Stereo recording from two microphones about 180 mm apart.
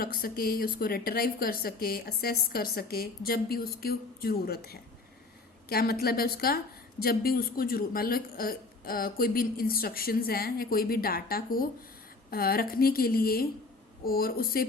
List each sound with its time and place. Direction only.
0.0 s a woman's voice: 55° left (ahead or behind)